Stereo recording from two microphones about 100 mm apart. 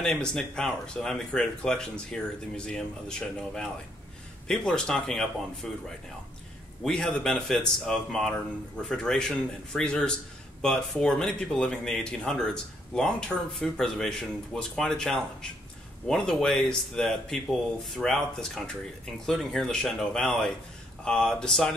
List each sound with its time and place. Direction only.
0.0 s speech: 5° left (ahead or behind)
6.8 s speech: 10° left (ahead or behind)